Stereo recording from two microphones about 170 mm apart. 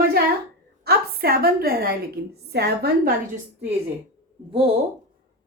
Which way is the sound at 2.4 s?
75° right (ahead or behind).